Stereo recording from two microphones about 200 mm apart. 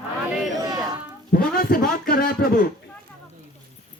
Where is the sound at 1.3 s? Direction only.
50° left (ahead or behind).